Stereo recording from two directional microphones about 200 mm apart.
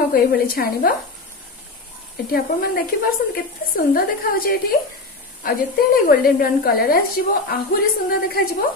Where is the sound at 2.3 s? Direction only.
45° left (ahead or behind).